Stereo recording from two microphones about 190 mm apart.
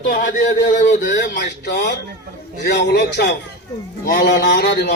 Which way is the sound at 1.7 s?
55° left (ahead or behind).